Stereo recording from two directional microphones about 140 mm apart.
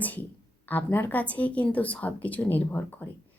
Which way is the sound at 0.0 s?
10° left (ahead or behind).